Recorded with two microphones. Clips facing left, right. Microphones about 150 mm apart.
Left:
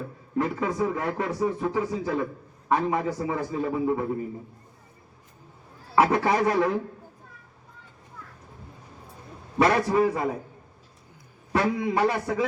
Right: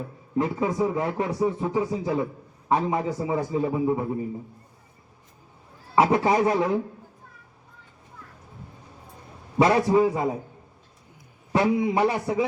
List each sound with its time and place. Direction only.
0.3 s speech: 20° right (ahead or behind)
6.0 s speech: 20° right (ahead or behind)
9.6 s speech: 20° right (ahead or behind)
11.5 s speech: 20° right (ahead or behind)